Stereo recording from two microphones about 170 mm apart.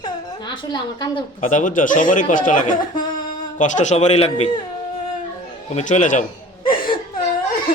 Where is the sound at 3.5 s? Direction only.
45° left (ahead or behind).